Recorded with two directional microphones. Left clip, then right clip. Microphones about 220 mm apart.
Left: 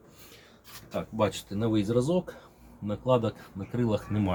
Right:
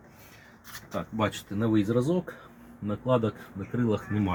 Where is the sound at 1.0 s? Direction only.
Centre (ahead or behind).